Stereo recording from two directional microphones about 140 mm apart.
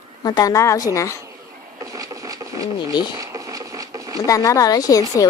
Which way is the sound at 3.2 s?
25° right (ahead or behind).